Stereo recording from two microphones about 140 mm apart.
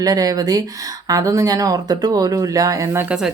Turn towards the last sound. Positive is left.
turn(degrees=-15)  # may be behind; listen again after turning